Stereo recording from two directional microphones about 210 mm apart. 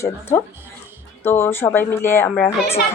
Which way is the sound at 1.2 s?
10° left (ahead or behind).